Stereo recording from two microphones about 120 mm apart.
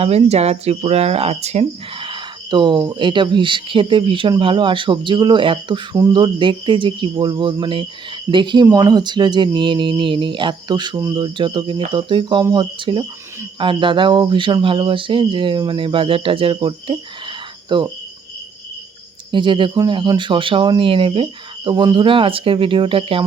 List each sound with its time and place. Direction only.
0.0 s speech: 60° right (ahead or behind)
2.0 s speech: 40° right (ahead or behind)
19.3 s speech: 45° right (ahead or behind)